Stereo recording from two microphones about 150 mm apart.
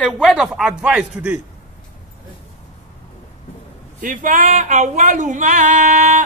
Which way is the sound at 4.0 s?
60° right (ahead or behind).